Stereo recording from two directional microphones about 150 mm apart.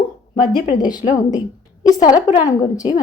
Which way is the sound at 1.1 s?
55° left (ahead or behind).